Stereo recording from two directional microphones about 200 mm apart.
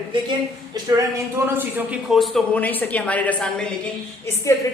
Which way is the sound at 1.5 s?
10° right (ahead or behind).